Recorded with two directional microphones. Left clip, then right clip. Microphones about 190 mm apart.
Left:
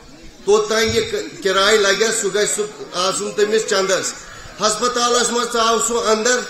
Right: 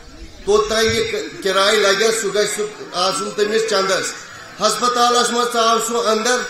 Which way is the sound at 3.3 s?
Centre (ahead or behind).